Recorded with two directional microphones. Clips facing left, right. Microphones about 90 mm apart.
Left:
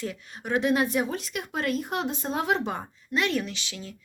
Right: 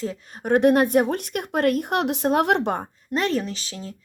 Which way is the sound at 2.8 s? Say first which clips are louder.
Right 3 dB; 40° right (ahead or behind).